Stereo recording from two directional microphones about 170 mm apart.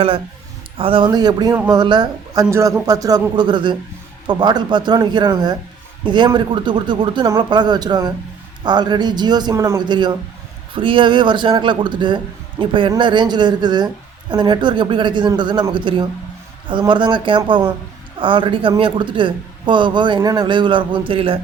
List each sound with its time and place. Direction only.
0.8 s a man's voice: 30° right (ahead or behind)